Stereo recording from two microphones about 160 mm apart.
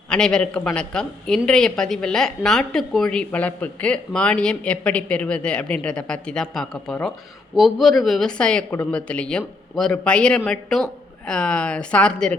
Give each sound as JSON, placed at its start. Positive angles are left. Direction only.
{"t": 0.1, "sound": "a woman's voice", "side_deg": 5}